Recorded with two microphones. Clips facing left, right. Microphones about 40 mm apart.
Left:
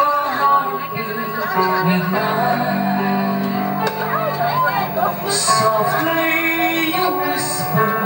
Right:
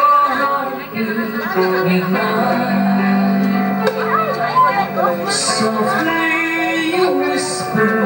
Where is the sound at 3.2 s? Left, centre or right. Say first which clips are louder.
Right 4 dB; left.